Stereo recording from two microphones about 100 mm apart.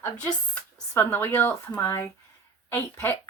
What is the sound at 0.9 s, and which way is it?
Speech, 20° left (ahead or behind).